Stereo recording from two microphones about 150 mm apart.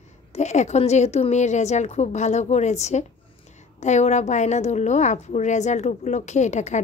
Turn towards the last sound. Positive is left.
turn(degrees=50)  # may be behind; listen again after turning